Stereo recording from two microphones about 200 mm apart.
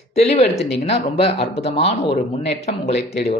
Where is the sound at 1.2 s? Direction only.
30° left (ahead or behind).